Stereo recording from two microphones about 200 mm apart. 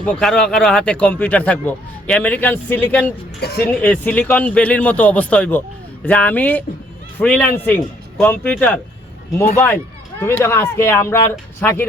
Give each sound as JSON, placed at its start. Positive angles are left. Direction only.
{"t": 0.0, "sound": "speech", "side_deg": 5}
{"t": 3.4, "sound": "speech", "side_deg": 55}
{"t": 3.8, "sound": "speech", "side_deg": 5}
{"t": 10.2, "sound": "speech", "side_deg": 10}